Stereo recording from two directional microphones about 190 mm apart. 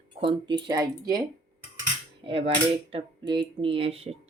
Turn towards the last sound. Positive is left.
turn(degrees=-30)  # may be behind; listen again after turning